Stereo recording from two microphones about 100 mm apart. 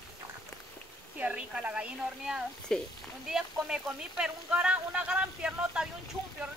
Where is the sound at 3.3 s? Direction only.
5° right (ahead or behind).